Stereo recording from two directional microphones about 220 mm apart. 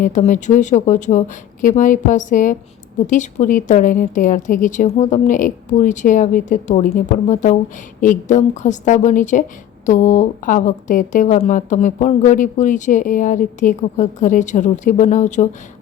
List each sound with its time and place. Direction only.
0.0 s a woman's voice: 35° left (ahead or behind)